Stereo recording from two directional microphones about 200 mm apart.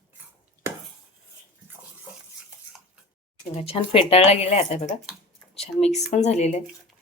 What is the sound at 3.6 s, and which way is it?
Speech, 30° left (ahead or behind).